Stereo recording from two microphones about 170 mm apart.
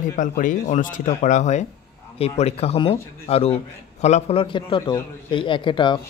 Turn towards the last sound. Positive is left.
turn(degrees=30)  # may be behind; listen again after turning